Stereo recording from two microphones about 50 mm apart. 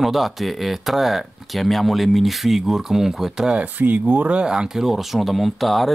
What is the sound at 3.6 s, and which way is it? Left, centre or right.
Speech, right.